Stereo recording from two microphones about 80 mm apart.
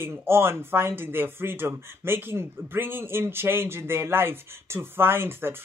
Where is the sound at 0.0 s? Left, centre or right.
Right.